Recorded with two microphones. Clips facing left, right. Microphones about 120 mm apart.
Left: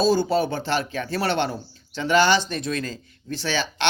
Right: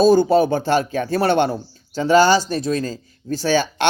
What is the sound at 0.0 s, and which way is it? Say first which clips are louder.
Speech: right 7 dB; 50° right (ahead or behind).